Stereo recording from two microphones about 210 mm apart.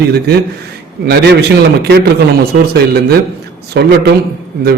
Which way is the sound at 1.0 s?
50° right (ahead or behind).